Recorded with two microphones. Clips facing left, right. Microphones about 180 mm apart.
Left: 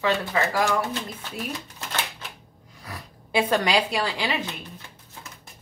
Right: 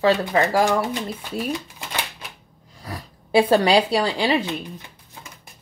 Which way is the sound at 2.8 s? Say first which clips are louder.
Right 5 dB; 35° right (ahead or behind).